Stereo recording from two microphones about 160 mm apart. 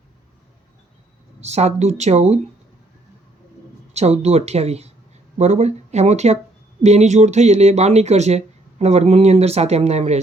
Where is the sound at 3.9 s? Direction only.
45° right (ahead or behind).